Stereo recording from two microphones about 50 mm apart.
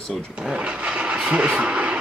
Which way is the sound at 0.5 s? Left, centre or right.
Right.